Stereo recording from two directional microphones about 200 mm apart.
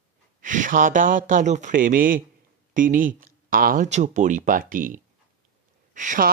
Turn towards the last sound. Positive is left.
turn(degrees=-40)  # may be behind; listen again after turning